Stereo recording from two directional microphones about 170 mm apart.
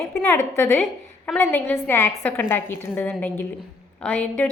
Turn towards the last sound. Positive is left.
turn(degrees=10)  # may be behind; listen again after turning